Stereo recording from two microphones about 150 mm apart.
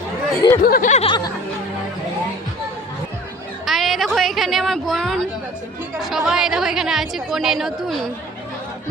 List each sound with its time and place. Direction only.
0.3 s speech: 20° left (ahead or behind)
0.6 s a sound: 75° left (ahead or behind)
1.0 s speech: 30° left (ahead or behind)
3.7 s a woman's voice: centre (ahead or behind)